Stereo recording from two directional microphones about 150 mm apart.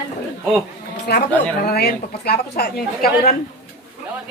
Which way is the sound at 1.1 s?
90° left.